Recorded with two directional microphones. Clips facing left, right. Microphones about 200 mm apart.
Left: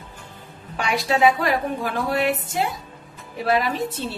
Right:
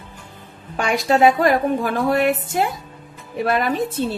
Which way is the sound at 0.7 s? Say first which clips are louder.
Right 4 dB; 50° right (ahead or behind).